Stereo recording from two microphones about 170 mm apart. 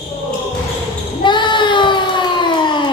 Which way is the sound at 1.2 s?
25° left (ahead or behind).